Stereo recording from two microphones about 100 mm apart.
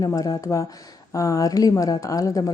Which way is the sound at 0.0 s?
35° left (ahead or behind).